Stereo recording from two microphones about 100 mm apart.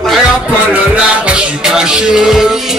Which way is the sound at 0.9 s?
10° right (ahead or behind).